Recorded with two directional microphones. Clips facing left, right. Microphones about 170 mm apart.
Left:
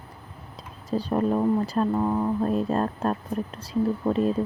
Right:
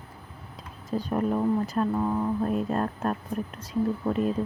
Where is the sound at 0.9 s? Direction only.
30° left (ahead or behind).